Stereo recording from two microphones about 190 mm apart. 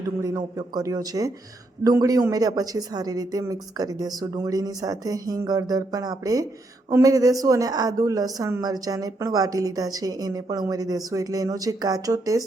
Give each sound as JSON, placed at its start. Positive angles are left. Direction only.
{"t": 0.2, "sound": "a woman's voice", "side_deg": -20}